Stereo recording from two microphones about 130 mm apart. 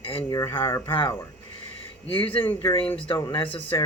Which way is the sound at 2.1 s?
45° left (ahead or behind).